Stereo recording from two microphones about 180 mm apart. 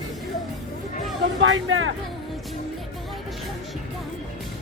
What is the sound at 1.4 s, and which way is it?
Speech, 90° right.